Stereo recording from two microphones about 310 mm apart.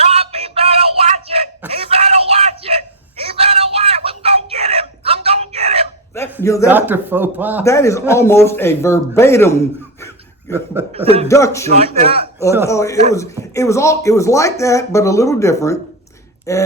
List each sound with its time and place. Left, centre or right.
0.0 s music: centre
1.7 s screaming: centre
6.4 s speech: centre
6.7 s speech: centre
7.6 s speech: centre
11.8 s a man's voice: centre
12.6 s speech: centre